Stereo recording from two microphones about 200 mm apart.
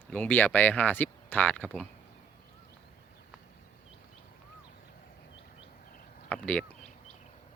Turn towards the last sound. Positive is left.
turn(degrees=5)  # may be behind; listen again after turning